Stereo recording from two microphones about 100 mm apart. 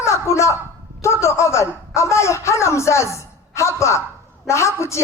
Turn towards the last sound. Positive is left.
turn(degrees=30)  # may be behind; listen again after turning